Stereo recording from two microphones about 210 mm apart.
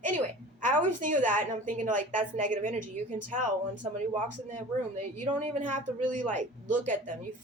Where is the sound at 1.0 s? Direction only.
40° right (ahead or behind).